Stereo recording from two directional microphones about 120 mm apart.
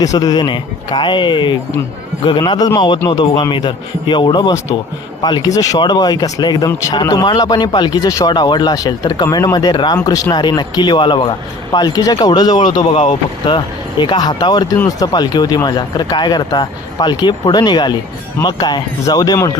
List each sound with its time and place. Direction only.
0.0 s speech: 30° left (ahead or behind)
10.0 s speech: 25° left (ahead or behind)